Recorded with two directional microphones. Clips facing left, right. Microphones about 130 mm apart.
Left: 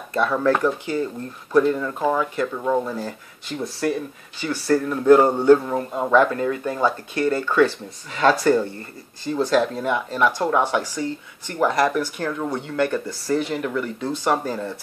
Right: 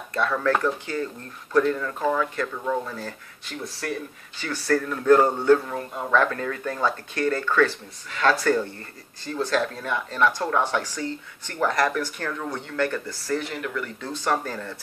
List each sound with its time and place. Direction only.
0.1 s speech: 15° left (ahead or behind)